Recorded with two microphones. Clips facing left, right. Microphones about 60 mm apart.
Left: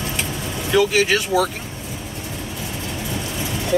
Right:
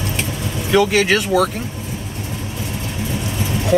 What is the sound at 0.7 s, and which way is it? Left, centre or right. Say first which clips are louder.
Speech: right 2 dB; right.